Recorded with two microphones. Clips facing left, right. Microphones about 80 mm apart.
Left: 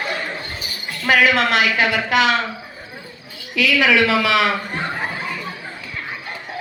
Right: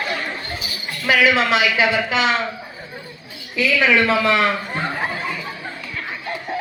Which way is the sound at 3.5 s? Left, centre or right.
Left.